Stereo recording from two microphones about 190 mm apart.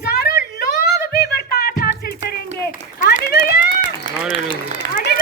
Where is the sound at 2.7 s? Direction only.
55° left (ahead or behind).